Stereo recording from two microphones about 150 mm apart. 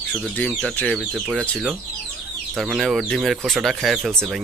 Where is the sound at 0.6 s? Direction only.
5° left (ahead or behind).